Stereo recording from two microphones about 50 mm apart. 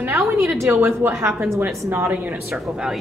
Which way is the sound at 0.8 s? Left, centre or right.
Right.